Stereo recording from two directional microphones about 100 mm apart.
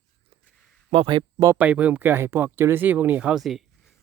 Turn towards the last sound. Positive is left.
turn(degrees=-10)  # may be behind; listen again after turning